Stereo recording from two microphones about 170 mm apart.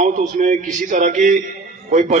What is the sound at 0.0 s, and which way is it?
A man's voice, 45° right (ahead or behind).